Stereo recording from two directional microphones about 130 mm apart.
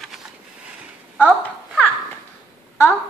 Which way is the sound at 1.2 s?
10° left (ahead or behind).